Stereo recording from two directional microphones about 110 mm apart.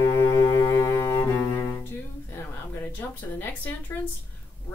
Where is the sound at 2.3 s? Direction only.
15° left (ahead or behind).